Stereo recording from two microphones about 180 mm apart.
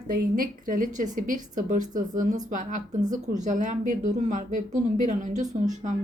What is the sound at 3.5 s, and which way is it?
A woman's voice, 45° right (ahead or behind).